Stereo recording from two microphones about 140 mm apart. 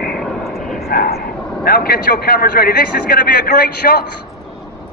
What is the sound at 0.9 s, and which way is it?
Vehicle, 90° left.